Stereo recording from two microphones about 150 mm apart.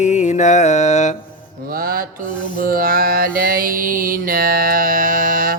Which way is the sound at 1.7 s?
75° right (ahead or behind).